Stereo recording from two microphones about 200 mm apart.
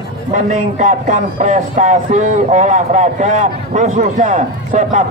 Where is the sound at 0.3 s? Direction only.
40° right (ahead or behind).